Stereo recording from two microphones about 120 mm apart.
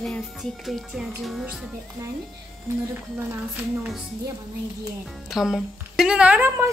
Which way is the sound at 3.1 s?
20° right (ahead or behind).